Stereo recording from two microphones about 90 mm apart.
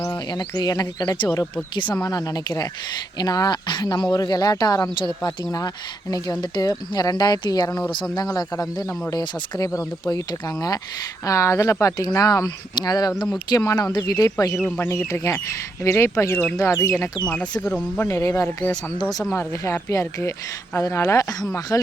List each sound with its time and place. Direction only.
0.1 s speech: 55° left (ahead or behind)
2.0 s speech: 45° left (ahead or behind)
4.1 s speech: 45° left (ahead or behind)
4.9 s speech: 60° left (ahead or behind)
5.5 s speech: 45° left (ahead or behind)
11.3 s speech: 35° left (ahead or behind)
17.2 s speech: 10° left (ahead or behind)
18.0 s speech: 35° left (ahead or behind)